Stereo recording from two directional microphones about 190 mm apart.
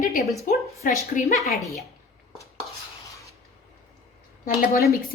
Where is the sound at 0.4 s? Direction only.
45° left (ahead or behind).